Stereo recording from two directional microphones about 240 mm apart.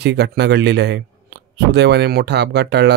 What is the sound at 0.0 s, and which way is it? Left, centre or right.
Speech, right.